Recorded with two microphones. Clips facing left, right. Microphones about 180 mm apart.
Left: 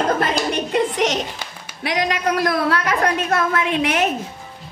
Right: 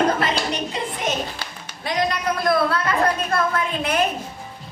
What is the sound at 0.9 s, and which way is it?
A woman's voice, 90° left.